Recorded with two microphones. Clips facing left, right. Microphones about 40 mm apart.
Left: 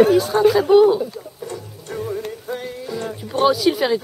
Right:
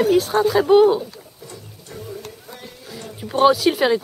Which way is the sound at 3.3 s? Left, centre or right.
Centre.